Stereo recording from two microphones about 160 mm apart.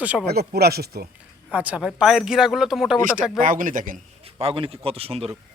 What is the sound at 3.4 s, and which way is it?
Speech, 55° right (ahead or behind).